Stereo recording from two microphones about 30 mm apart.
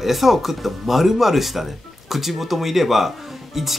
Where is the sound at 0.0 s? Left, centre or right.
Centre.